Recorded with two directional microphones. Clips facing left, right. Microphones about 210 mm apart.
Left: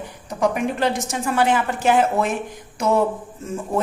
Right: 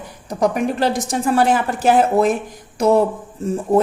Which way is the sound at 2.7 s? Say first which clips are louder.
Right 5 dB; 35° right (ahead or behind).